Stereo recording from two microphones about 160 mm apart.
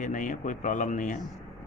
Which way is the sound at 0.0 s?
55° left (ahead or behind).